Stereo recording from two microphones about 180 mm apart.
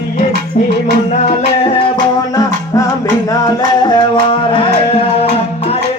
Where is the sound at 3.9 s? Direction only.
25° left (ahead or behind).